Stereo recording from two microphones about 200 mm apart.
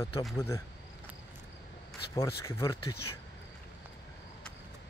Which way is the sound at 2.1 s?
15° left (ahead or behind).